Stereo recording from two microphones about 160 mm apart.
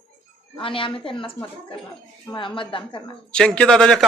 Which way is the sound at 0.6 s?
35° left (ahead or behind).